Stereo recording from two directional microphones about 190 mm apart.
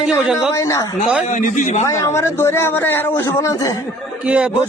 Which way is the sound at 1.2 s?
40° left (ahead or behind).